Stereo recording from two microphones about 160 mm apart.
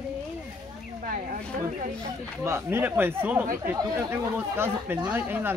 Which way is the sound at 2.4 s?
15° right (ahead or behind).